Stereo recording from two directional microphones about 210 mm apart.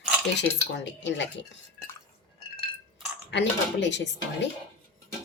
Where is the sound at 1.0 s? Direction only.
60° left (ahead or behind).